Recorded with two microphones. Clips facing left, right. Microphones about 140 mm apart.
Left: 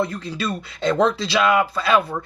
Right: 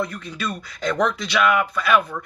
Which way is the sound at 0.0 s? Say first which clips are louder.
Left 3 dB; 30° left (ahead or behind).